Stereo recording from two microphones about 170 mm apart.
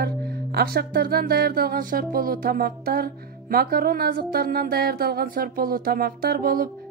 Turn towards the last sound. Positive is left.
turn(degrees=-60)  # may be behind; listen again after turning